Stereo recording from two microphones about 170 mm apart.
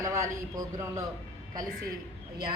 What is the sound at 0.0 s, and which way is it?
A man's voice, 20° right (ahead or behind).